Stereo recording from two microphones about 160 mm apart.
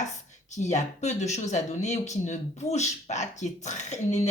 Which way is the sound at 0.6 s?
45° left (ahead or behind).